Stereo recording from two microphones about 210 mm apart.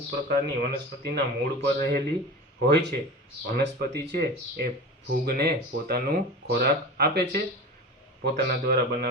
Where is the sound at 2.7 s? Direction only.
55° right (ahead or behind).